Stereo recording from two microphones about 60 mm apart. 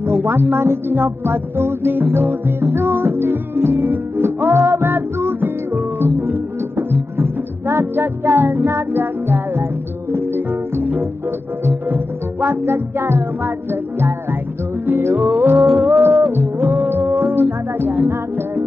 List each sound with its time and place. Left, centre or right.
0.0 s speech: right
5.9 s music: right
15.6 s music: centre
15.9 s music: right